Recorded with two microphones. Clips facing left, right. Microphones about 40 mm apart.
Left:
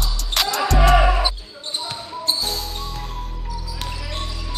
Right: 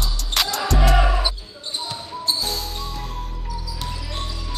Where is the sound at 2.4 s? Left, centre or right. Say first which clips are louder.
Even; centre.